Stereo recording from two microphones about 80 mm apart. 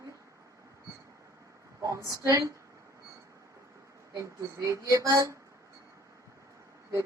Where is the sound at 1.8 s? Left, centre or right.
Right.